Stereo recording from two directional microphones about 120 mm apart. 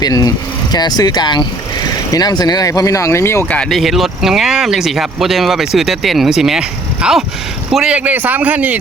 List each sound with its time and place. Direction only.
0.0 s speech: 30° left (ahead or behind)
3.5 s speech: 5° left (ahead or behind); by 8.8 s 10° right (ahead or behind)